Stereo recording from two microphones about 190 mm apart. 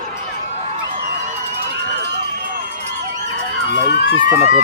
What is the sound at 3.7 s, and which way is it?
Speech, 65° left (ahead or behind).